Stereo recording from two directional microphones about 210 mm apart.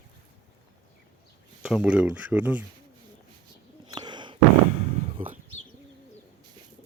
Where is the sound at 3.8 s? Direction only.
20° right (ahead or behind).